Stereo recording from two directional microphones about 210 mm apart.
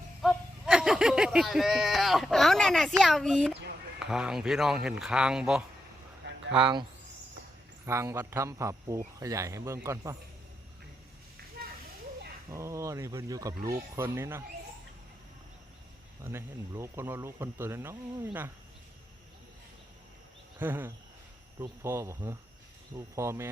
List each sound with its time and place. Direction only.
0.2 s a sound: centre (ahead or behind)
3.0 s speech: centre (ahead or behind)
6.2 s a sound: 55° right (ahead or behind)
6.6 s speech: 20° right (ahead or behind)
7.9 s a man's voice: 15° right (ahead or behind)
12.5 s a man's voice: 15° right (ahead or behind)
16.2 s a man's voice: 10° right (ahead or behind)
20.6 s a man's voice: 10° right (ahead or behind)